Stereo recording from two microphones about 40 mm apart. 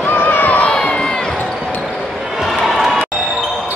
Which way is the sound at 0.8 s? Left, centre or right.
Left.